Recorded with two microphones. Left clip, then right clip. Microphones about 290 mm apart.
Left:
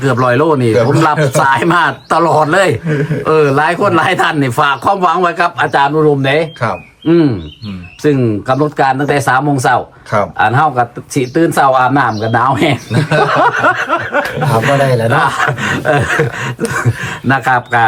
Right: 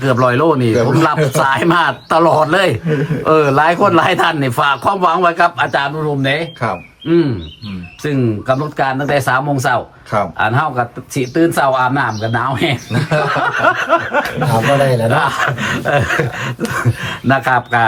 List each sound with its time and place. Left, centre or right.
0.0 s a man's voice: centre
8.0 s speech: centre
12.9 s speech: left
13.4 s a man's voice: centre